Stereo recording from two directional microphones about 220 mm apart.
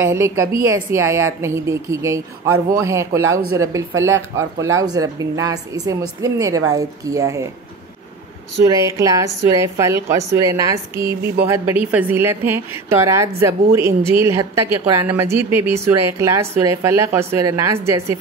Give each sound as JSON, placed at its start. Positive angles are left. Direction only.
{"t": 0.0, "sound": "a woman's voice", "side_deg": -10}
{"t": 8.6, "sound": "a woman's voice", "side_deg": -15}